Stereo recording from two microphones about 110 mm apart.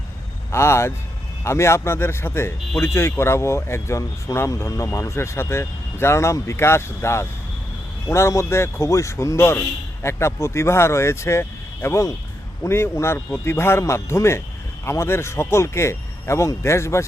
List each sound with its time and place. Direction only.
0.5 s speech: 25° left (ahead or behind)